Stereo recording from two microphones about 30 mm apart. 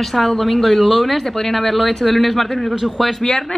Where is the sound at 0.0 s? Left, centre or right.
Centre.